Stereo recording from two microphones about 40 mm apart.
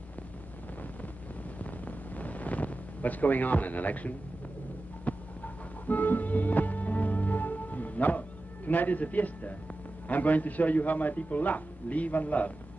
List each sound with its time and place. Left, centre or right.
1.6 s a sound: left
5.9 s music: left
10.0 s a man's voice: left